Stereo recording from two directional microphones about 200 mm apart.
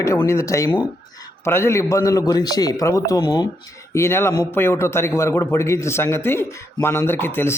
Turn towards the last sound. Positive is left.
turn(degrees=10)  # may be behind; listen again after turning